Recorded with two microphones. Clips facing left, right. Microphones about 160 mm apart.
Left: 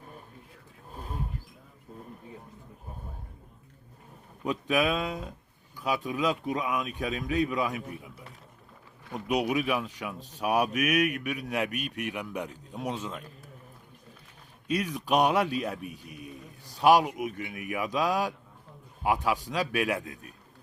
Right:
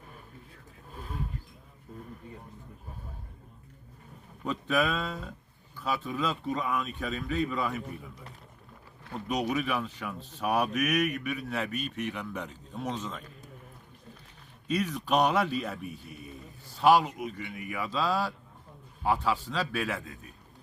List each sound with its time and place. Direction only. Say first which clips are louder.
0.9 s wild animals: left 2 dB; 40° left (ahead or behind)
4.4 s speech: left 2 dB; 10° left (ahead or behind)
14.7 s speech: left 1 dB; 10° left (ahead or behind)